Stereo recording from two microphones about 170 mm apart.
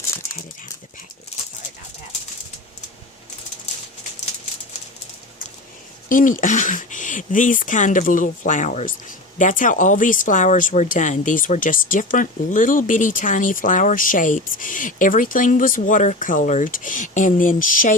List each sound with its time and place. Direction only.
6.1 s speech: 50° left (ahead or behind)